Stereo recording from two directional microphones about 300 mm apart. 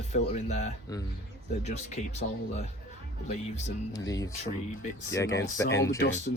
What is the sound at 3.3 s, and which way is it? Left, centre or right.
Speech, left.